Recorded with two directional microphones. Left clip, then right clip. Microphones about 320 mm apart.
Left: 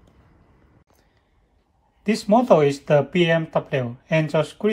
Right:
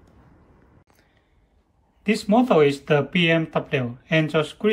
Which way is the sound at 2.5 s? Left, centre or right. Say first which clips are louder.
Left 1 dB; centre.